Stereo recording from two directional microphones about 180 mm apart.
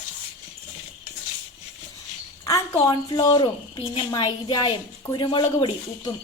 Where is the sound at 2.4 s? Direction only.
20° left (ahead or behind).